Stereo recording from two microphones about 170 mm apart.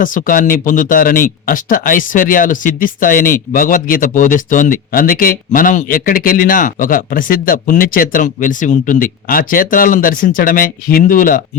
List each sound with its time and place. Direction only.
0.0 s speech: 50° left (ahead or behind)